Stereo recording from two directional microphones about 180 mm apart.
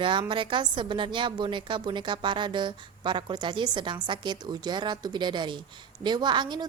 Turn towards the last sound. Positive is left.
turn(degrees=-25)  # may be behind; listen again after turning